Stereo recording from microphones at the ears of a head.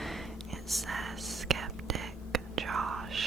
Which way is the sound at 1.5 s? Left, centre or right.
Right.